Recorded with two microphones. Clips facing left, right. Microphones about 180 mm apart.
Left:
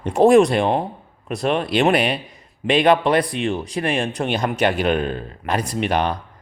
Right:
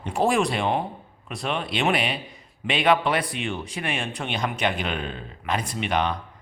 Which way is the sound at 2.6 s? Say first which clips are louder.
Left 6 dB; 40° left (ahead or behind).